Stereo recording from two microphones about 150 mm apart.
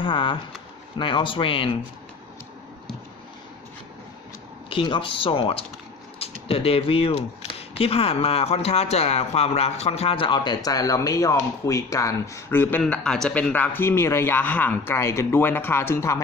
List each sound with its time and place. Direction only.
0.0 s speech: 35° left (ahead or behind)
4.6 s speech: 35° left (ahead or behind); by 16.2 s 15° left (ahead or behind)